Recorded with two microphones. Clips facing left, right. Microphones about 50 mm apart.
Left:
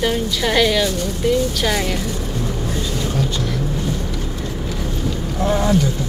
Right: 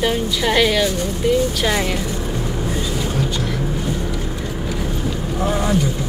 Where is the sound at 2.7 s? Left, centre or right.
Centre.